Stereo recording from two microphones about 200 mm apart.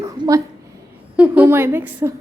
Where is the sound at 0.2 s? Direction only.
15° right (ahead or behind).